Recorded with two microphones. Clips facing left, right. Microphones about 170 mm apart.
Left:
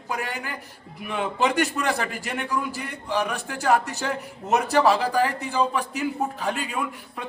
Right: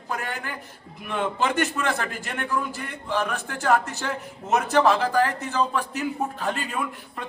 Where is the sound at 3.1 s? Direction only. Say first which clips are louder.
Even; 15° left (ahead or behind).